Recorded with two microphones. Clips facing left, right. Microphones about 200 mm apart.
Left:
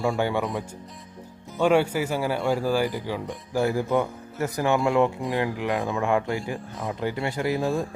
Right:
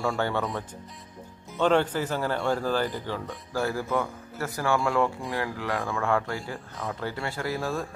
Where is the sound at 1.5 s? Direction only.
10° left (ahead or behind).